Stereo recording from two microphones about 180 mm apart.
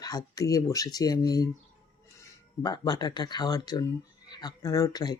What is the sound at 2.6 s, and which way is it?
Speech, 20° left (ahead or behind).